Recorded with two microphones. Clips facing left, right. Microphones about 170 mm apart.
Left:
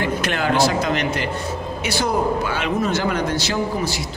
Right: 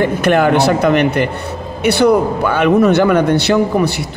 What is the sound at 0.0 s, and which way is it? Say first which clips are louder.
Speech: right 10 dB; 55° right (ahead or behind).